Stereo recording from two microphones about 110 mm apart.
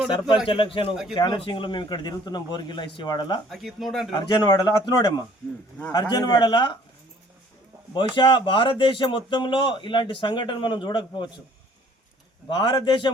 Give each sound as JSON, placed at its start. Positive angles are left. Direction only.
{"t": 0.4, "sound": "speech", "side_deg": 50}
{"t": 3.5, "sound": "speech", "side_deg": 0}
{"t": 4.1, "sound": "speech", "side_deg": 40}
{"t": 7.9, "sound": "speech", "side_deg": 45}
{"t": 12.5, "sound": "speech", "side_deg": 45}